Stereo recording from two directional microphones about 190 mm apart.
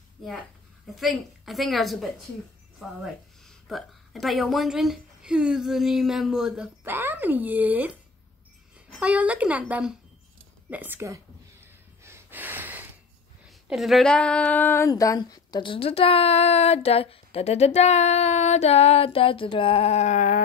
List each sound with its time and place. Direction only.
0.9 s speech: centre (ahead or behind)
3.4 s speech: centre (ahead or behind)
12.0 s snort: 10° right (ahead or behind)
13.5 s a sound: centre (ahead or behind); by 20.4 s 40° left (ahead or behind)